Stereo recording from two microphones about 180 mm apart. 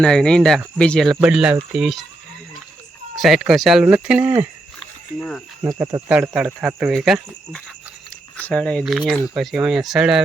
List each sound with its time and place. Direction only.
0.0 s speech: 5° left (ahead or behind)
3.2 s speech: centre (ahead or behind)
5.6 s speech: 20° right (ahead or behind)
6.1 s speech: 5° right (ahead or behind)